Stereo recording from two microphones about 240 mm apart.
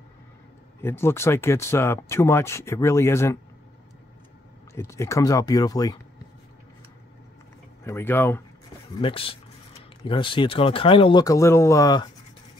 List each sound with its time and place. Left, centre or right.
0.8 s speech: centre
4.7 s speech: centre
7.8 s speech: centre
9.0 s speech: left